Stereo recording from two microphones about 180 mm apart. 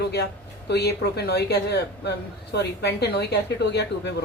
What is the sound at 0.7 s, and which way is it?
A woman's voice, 65° left (ahead or behind).